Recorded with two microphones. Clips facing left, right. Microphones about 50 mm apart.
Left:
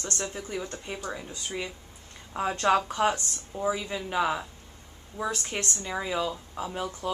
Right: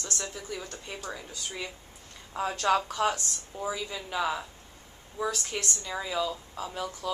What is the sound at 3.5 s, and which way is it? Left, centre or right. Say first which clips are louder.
A woman's voice: left 5 dB; centre.